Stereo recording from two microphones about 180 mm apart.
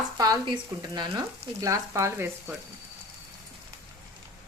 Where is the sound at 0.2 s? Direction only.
25° right (ahead or behind).